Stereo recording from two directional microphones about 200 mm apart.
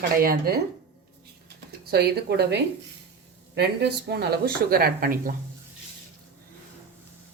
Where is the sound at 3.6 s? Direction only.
55° right (ahead or behind).